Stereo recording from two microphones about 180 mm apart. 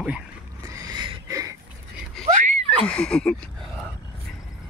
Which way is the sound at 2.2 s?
40° right (ahead or behind).